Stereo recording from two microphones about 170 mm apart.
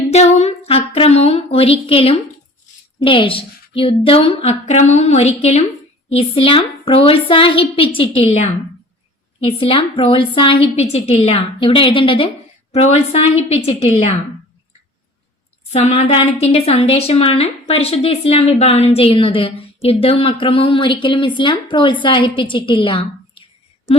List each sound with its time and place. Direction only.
0.1 s a sound: 40° left (ahead or behind)
3.0 s a woman's voice: 30° left (ahead or behind)
15.7 s a woman's voice: 40° left (ahead or behind)